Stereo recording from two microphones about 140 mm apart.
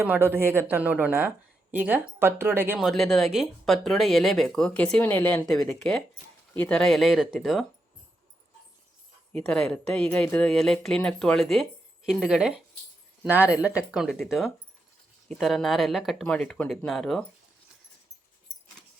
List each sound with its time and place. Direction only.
0.0 s speech: 15° right (ahead or behind)
2.7 s speech: centre (ahead or behind)
9.3 s speech: 5° left (ahead or behind)